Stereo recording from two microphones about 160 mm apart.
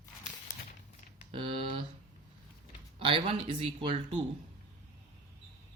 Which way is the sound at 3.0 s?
35° right (ahead or behind).